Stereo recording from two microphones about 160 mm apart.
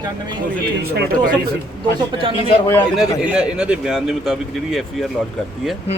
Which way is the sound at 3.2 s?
5° right (ahead or behind).